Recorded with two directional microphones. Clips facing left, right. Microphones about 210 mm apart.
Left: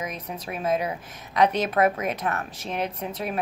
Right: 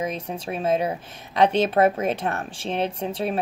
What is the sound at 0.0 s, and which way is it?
Speech, 30° right (ahead or behind).